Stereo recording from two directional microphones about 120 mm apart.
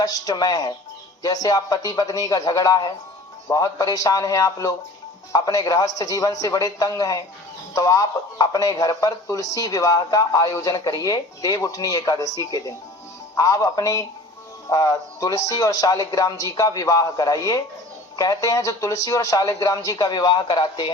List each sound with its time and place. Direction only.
0.0 s speech: 30° left (ahead or behind)